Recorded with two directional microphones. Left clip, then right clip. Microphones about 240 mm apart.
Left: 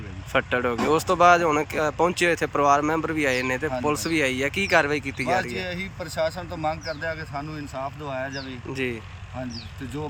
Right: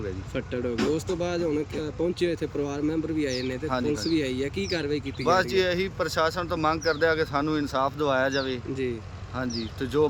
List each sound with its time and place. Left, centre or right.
0.3 s speech: centre
5.4 s speech: centre
8.7 s speech: centre